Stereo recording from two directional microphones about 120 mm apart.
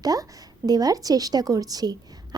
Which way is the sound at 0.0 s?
30° right (ahead or behind).